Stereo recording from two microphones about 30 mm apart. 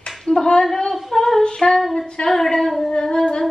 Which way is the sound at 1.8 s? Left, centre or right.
Centre.